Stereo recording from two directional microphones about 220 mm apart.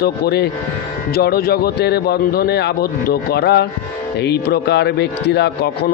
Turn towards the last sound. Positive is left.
turn(degrees=50)  # may be behind; listen again after turning